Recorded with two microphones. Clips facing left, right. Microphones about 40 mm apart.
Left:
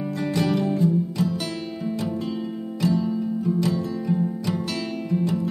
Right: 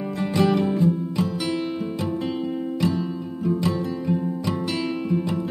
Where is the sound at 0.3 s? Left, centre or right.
Centre.